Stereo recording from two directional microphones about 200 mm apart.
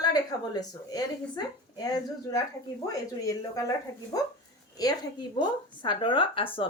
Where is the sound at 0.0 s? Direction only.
20° left (ahead or behind).